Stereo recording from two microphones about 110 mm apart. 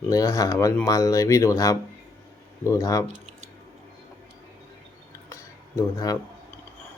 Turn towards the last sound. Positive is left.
turn(degrees=35)  # may be behind; listen again after turning